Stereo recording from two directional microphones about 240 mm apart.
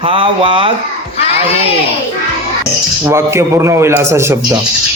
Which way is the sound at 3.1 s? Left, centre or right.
Centre.